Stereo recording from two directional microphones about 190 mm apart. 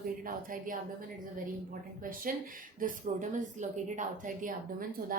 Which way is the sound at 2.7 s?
45° right (ahead or behind).